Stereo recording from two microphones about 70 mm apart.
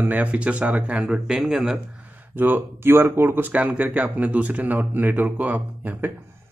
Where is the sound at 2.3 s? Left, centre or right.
Right.